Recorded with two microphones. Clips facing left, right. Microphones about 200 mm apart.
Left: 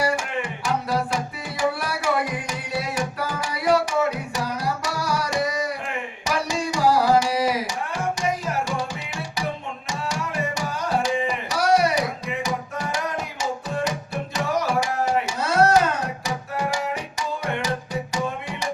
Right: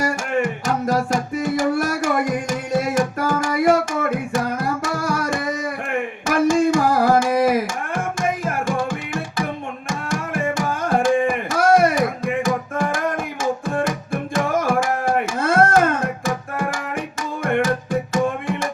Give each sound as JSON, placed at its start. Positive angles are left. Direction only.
{"t": 0.0, "sound": "music", "side_deg": -45}
{"t": 5.9, "sound": "tabla", "side_deg": -50}
{"t": 17.4, "sound": "music", "side_deg": -50}